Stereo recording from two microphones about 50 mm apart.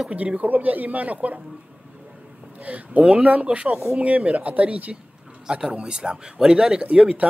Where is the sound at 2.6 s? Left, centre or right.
Right.